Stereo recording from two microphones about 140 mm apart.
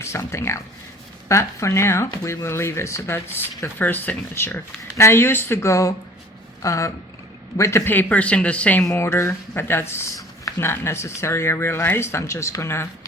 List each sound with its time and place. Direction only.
0.0 s speech: 20° left (ahead or behind)